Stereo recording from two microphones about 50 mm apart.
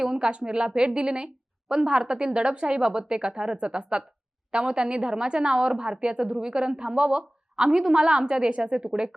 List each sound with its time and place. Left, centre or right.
0.0 s a woman's voice: centre